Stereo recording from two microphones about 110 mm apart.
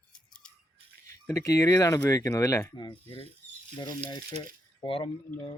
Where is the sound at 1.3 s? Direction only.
30° left (ahead or behind).